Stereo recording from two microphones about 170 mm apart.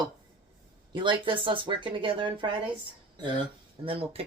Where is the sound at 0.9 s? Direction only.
30° right (ahead or behind).